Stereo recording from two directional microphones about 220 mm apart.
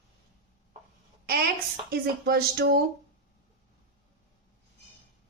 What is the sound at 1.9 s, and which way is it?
Speech, 45° right (ahead or behind).